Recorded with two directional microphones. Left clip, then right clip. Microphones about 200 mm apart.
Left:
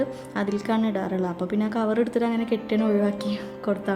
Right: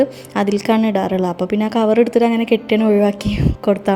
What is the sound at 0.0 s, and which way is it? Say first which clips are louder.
A woman's voice: right 10 dB; 30° right (ahead or behind).